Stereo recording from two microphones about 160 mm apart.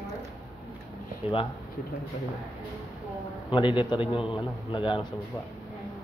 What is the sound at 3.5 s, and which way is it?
A man's voice, 30° left (ahead or behind).